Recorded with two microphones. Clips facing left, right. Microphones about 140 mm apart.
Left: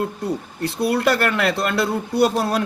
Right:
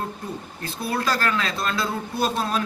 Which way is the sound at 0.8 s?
70° left (ahead or behind).